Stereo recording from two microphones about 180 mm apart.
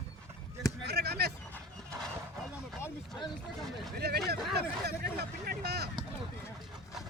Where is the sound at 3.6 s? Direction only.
Centre (ahead or behind).